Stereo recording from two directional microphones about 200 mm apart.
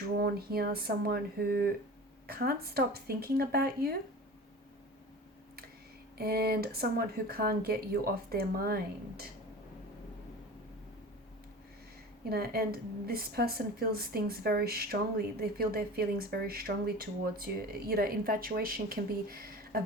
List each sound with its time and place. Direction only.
0.2 s speech: 50° right (ahead or behind)
6.1 s speech: 50° right (ahead or behind)
12.3 s speech: 50° right (ahead or behind)